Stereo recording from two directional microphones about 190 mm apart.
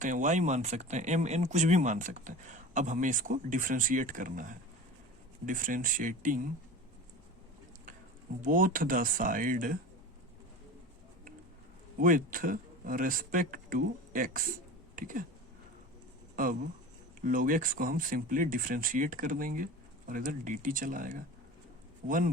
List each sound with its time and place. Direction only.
0.0 s speech: 40° right (ahead or behind)
8.4 s speech: 45° right (ahead or behind)
11.9 s speech: 45° right (ahead or behind)
16.3 s speech: 45° right (ahead or behind)